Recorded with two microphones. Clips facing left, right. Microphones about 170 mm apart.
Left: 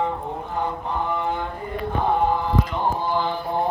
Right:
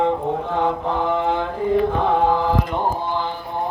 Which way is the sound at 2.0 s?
90° right.